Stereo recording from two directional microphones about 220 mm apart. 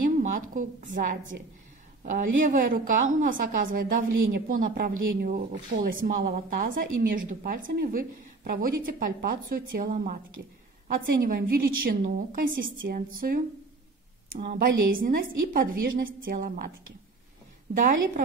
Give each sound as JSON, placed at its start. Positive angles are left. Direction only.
{"t": 0.2, "sound": "a woman's voice", "side_deg": -35}
{"t": 11.1, "sound": "a woman's voice", "side_deg": -40}
{"t": 14.4, "sound": "a woman's voice", "side_deg": -35}
{"t": 17.7, "sound": "a woman's voice", "side_deg": -35}